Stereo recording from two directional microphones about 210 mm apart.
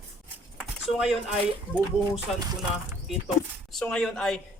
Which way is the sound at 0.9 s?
5° right (ahead or behind).